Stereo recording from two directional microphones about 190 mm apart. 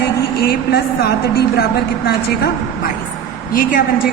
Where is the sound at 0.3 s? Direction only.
55° left (ahead or behind).